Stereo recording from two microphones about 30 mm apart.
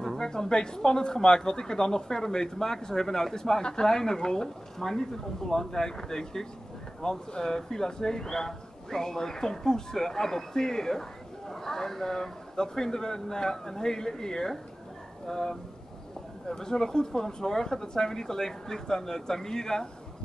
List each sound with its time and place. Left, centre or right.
0.2 s speech: left